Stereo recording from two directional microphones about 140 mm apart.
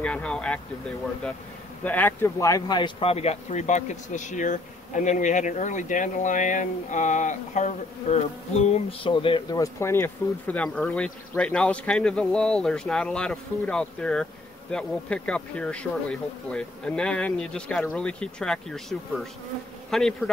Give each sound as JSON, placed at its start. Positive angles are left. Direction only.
{"t": 0.0, "sound": "speech", "side_deg": 10}
{"t": 1.9, "sound": "speech", "side_deg": 15}
{"t": 9.0, "sound": "speech", "side_deg": 40}
{"t": 9.6, "sound": "speech", "side_deg": 20}